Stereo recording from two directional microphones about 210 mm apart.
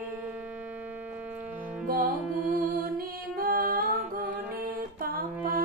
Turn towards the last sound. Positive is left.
turn(degrees=-45)  # may be behind; listen again after turning